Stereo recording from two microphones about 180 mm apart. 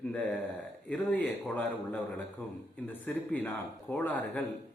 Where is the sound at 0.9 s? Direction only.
10° left (ahead or behind).